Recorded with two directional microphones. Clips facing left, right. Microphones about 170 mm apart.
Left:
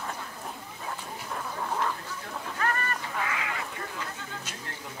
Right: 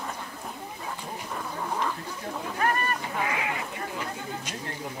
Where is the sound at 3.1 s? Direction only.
25° right (ahead or behind).